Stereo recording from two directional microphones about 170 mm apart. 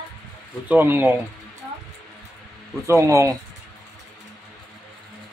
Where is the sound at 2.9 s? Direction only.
15° right (ahead or behind).